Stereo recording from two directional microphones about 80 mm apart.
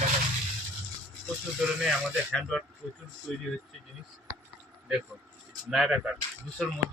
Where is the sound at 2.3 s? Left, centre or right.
Centre.